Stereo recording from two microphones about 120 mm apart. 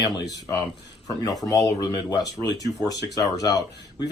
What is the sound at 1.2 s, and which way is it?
Speech, 30° left (ahead or behind).